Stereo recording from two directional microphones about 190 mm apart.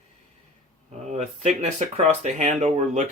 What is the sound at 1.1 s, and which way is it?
Speech, 35° right (ahead or behind).